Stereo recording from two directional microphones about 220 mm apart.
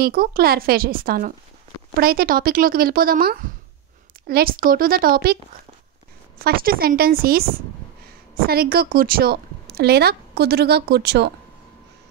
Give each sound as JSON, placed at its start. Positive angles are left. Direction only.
{"t": 0.0, "sound": "speech", "side_deg": -40}
{"t": 6.4, "sound": "a woman's voice", "side_deg": -40}
{"t": 8.5, "sound": "a woman's voice", "side_deg": -45}